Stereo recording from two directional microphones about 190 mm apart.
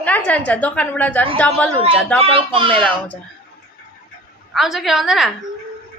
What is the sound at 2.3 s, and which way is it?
Speech, 25° right (ahead or behind).